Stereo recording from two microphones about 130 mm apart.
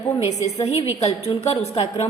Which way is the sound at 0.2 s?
60° left (ahead or behind).